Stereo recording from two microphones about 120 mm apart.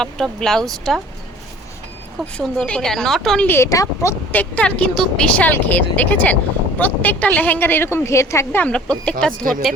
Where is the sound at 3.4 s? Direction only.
20° left (ahead or behind).